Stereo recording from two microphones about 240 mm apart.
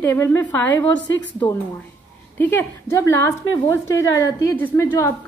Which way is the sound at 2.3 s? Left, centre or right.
Centre.